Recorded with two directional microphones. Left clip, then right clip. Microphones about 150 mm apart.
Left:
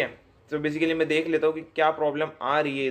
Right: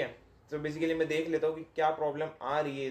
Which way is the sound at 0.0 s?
20° left (ahead or behind).